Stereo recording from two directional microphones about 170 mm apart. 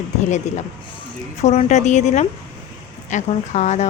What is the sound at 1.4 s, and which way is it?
A woman's voice, 40° left (ahead or behind).